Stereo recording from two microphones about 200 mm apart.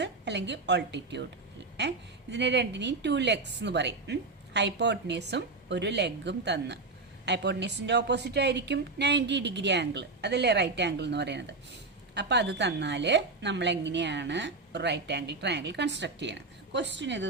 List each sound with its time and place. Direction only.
0.0 s a woman's voice: 60° right (ahead or behind)